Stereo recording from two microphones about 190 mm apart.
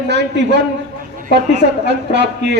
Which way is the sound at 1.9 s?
65° right (ahead or behind).